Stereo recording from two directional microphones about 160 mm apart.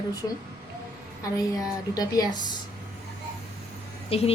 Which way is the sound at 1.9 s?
25° left (ahead or behind).